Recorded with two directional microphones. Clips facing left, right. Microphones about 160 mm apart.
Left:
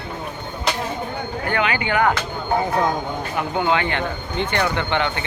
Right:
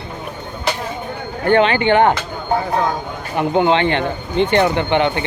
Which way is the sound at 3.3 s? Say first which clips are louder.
Right 7 dB; 25° right (ahead or behind).